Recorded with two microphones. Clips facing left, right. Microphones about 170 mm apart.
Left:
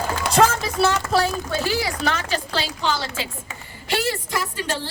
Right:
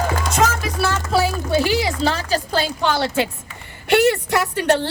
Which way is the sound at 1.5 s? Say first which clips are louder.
Right 5 dB; 15° right (ahead or behind).